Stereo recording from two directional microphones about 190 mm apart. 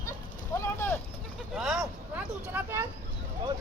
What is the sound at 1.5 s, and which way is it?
Vehicle, centre (ahead or behind).